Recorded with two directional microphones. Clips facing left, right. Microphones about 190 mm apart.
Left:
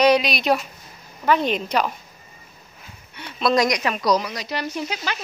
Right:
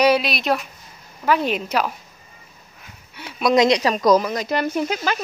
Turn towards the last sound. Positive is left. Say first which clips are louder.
# right 6 dB
turn(degrees=-50)  # may be behind; listen again after turning